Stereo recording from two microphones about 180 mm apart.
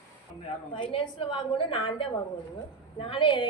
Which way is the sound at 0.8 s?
30° left (ahead or behind).